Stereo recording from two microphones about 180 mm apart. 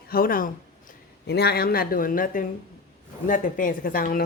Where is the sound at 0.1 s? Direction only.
50° left (ahead or behind).